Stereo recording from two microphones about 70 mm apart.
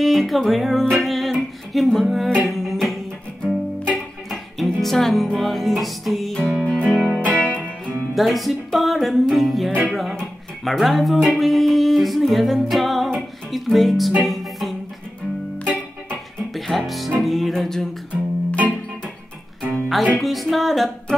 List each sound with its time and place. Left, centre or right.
0.0 s music: centre
6.6 s music: centre
8.1 s music: centre
10.1 s speech: centre
13.5 s music: centre
15.7 s music: centre
16.5 s music: centre
19.6 s music: centre